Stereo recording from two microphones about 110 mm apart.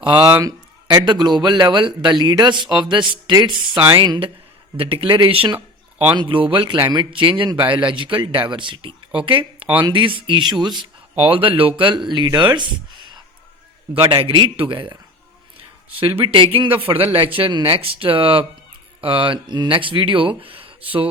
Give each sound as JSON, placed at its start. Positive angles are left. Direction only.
{"t": 0.0, "sound": "speech", "side_deg": -40}
{"t": 4.8, "sound": "speech", "side_deg": -55}
{"t": 5.5, "sound": "a sound", "side_deg": -15}
{"t": 6.1, "sound": "speech", "side_deg": -50}
{"t": 11.2, "sound": "speech", "side_deg": -55}
{"t": 12.0, "sound": "speech", "side_deg": -40}
{"t": 16.2, "sound": "speech", "side_deg": -50}